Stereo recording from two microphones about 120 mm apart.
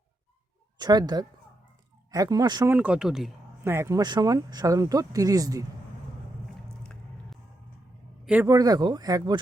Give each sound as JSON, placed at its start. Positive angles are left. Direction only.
{"t": 0.8, "sound": "speech", "side_deg": -35}
{"t": 2.6, "sound": "speech", "side_deg": -15}
{"t": 3.6, "sound": "speech", "side_deg": -20}
{"t": 4.0, "sound": "speech", "side_deg": -35}
{"t": 8.4, "sound": "speech", "side_deg": -30}